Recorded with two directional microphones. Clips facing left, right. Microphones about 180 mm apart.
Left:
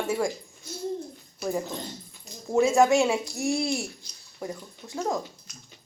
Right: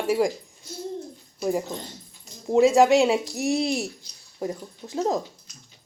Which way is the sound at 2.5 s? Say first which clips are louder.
Right 3 dB; 15° right (ahead or behind).